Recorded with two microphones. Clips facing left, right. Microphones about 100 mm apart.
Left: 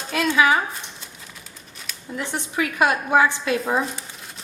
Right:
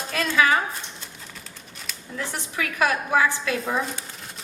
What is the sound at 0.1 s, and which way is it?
Speech, 20° left (ahead or behind).